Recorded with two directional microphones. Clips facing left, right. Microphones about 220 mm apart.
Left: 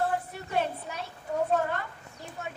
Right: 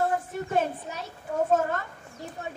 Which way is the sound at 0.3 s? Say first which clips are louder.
Right 9 dB; 45° right (ahead or behind).